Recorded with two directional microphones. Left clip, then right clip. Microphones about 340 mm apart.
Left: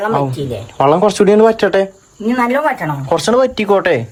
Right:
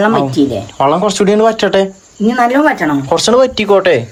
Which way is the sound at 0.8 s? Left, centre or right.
Centre.